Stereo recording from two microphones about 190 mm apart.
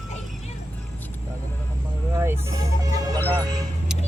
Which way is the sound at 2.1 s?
15° right (ahead or behind).